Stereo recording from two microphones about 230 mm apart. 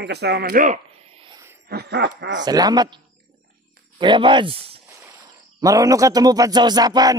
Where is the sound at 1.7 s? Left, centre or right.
Right.